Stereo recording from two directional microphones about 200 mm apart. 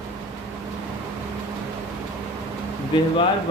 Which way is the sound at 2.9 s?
25° left (ahead or behind).